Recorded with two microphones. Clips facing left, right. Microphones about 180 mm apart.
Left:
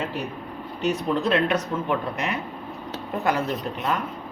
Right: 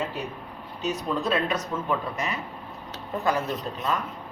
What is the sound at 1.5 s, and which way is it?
Speech, 60° left (ahead or behind).